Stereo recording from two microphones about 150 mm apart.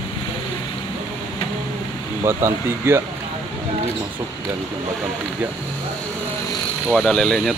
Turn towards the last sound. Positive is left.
turn(degrees=5)  # may be behind; listen again after turning